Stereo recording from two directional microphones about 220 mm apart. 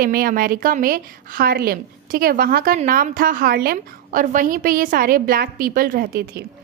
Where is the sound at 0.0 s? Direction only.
40° right (ahead or behind).